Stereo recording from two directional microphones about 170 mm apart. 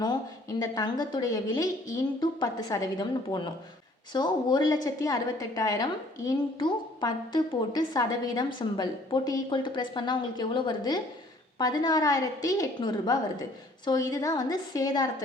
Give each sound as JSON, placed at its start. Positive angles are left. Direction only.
{"t": 0.6, "sound": "a woman's voice", "side_deg": 20}